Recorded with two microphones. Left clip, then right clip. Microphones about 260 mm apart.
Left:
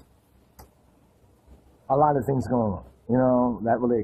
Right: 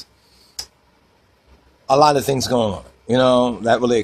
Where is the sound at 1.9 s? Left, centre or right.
Right.